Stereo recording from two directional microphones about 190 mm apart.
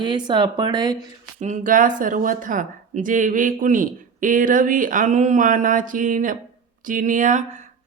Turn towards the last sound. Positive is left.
turn(degrees=-45)  # may be behind; listen again after turning